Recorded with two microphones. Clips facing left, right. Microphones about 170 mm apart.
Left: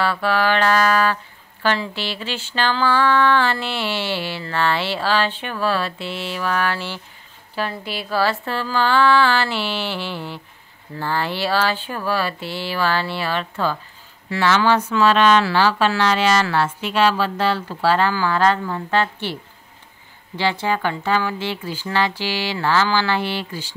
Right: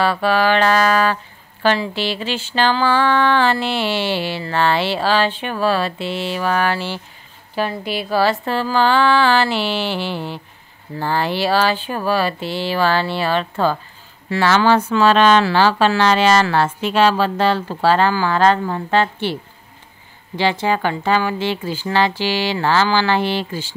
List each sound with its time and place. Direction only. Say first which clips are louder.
0.2 s speech: right 2 dB; 15° right (ahead or behind)
1.6 s a sound: right 4 dB; 15° right (ahead or behind)
12.1 s speech: right 4 dB; 20° right (ahead or behind); by 18.3 s 35° right (ahead or behind)
18.3 s speech: right 3 dB; 25° right (ahead or behind)
20.3 s speech: right 3 dB; 20° right (ahead or behind)